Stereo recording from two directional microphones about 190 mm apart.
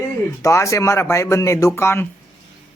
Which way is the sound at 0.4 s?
15° left (ahead or behind).